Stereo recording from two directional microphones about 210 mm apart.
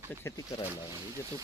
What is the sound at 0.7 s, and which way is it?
Speech, 15° right (ahead or behind).